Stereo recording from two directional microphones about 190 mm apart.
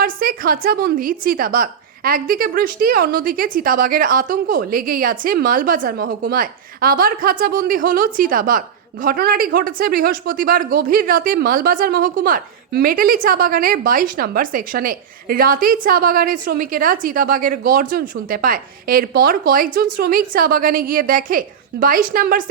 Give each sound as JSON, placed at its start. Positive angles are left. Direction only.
{"t": 0.0, "sound": "a woman's voice", "side_deg": -50}